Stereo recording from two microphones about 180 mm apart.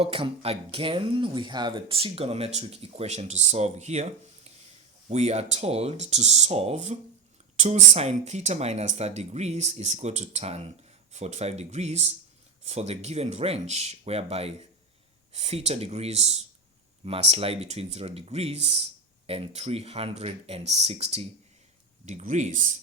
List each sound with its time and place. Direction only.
0.0 s speech: 30° right (ahead or behind)